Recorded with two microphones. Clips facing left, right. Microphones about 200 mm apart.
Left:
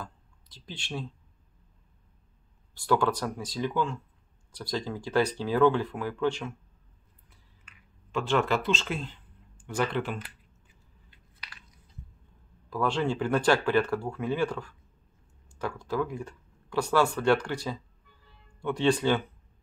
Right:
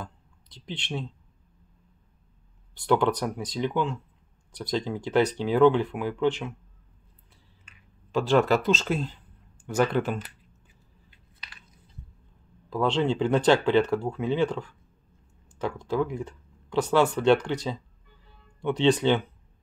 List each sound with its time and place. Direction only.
0.0 s a sound: 20° right (ahead or behind)
2.7 s speech: 20° right (ahead or behind)
8.1 s speech: 35° right (ahead or behind)
12.6 s speech: 20° right (ahead or behind)